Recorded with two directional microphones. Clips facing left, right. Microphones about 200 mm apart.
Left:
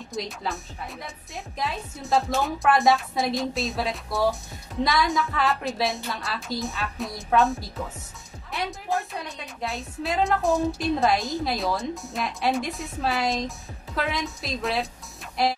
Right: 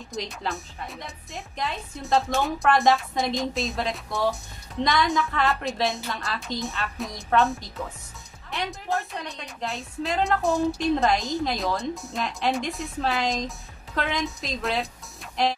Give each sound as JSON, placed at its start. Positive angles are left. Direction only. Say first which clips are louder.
{"t": 0.1, "sound": "a woman's voice", "louder": "even", "side_deg": 0}